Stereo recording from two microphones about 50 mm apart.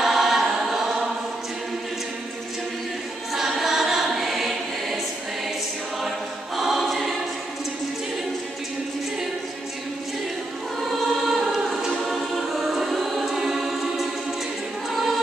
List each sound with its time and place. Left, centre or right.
0.0 s choir: centre
3.3 s choir: centre
6.0 s music: centre
11.1 s choir: centre
11.5 s music: centre
12.0 s choir: centre